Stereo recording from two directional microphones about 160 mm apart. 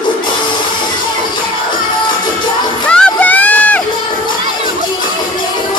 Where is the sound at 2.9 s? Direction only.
10° left (ahead or behind).